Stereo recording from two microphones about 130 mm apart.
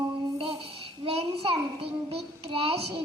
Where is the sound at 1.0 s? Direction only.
50° right (ahead or behind).